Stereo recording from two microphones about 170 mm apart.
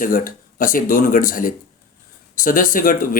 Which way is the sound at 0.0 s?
55° left (ahead or behind).